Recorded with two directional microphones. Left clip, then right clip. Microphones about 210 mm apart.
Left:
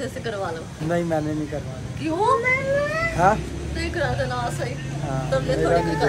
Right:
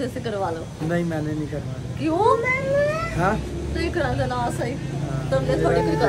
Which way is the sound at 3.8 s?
30° right (ahead or behind).